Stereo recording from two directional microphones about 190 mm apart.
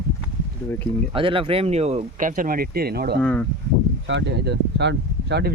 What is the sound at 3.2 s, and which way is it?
Speech, 10° left (ahead or behind).